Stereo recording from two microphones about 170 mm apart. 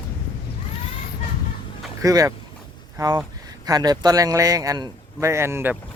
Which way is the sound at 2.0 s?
20° right (ahead or behind).